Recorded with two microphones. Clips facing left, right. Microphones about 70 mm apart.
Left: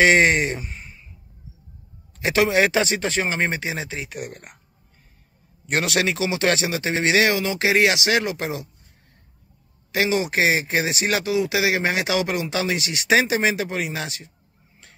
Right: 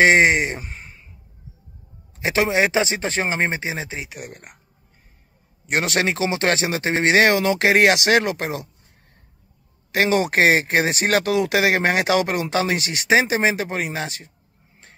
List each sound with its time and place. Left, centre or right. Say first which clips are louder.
0.0 s speech: right 1 dB; right
0.6 s a sound: even; right
2.1 s speech: left 1 dB; right
4.1 s speech: left 3 dB; centre
5.7 s speech: right 1 dB; right
9.9 s speech: right 3 dB; right
13.1 s speech: right 1 dB; right